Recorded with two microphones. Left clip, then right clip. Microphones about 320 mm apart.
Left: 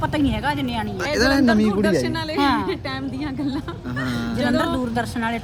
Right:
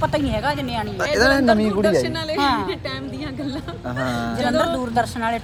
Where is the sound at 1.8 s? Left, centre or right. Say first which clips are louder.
Right 2 dB; centre.